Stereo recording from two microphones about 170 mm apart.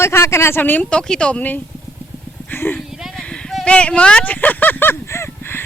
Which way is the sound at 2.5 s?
10° left (ahead or behind).